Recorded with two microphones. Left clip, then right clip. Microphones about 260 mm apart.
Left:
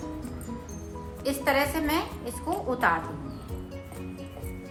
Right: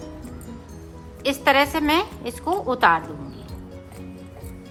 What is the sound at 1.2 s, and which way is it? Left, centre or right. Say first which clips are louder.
A woman's voice: right 7 dB; right.